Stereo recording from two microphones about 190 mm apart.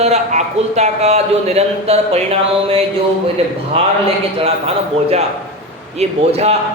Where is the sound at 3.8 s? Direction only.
30° right (ahead or behind).